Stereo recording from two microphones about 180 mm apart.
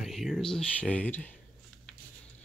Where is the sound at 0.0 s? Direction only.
Centre (ahead or behind).